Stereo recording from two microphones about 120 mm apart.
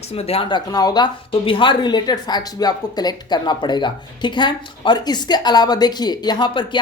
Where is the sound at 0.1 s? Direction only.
55° left (ahead or behind); by 1.1 s 35° left (ahead or behind).